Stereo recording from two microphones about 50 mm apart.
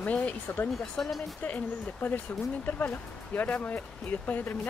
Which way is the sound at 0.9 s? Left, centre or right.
Centre.